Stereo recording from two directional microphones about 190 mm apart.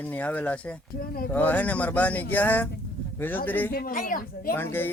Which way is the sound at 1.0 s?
50° left (ahead or behind).